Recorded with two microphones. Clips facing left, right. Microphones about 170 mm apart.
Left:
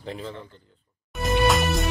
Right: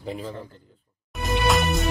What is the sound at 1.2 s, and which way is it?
Music, centre (ahead or behind).